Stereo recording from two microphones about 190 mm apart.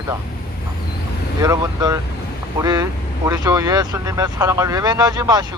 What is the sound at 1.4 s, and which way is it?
Speech, 20° right (ahead or behind).